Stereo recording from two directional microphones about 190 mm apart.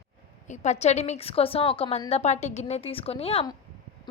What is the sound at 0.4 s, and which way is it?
A woman's voice, 40° left (ahead or behind).